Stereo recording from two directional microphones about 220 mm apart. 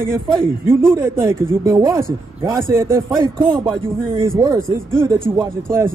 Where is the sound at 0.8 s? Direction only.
20° right (ahead or behind).